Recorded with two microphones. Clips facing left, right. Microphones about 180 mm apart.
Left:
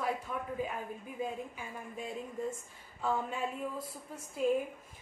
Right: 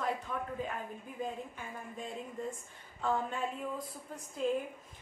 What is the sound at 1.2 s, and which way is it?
Speech, 5° left (ahead or behind).